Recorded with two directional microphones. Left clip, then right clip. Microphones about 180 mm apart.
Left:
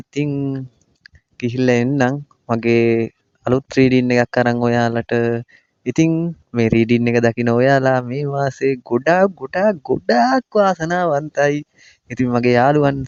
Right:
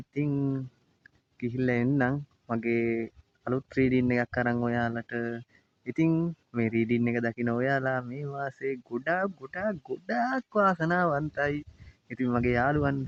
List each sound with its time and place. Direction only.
0.3 s speech: 25° left (ahead or behind)
1.4 s speech: 40° left (ahead or behind)
6.1 s speech: 20° left (ahead or behind)
6.5 s speech: 45° left (ahead or behind)